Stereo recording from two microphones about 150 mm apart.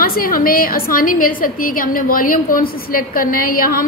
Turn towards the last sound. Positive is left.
turn(degrees=75)  # may be behind; listen again after turning